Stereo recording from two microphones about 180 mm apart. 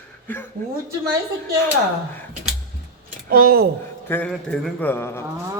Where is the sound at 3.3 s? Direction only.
55° right (ahead or behind).